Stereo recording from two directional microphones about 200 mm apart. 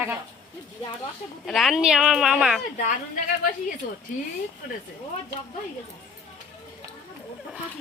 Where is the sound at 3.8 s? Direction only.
45° left (ahead or behind).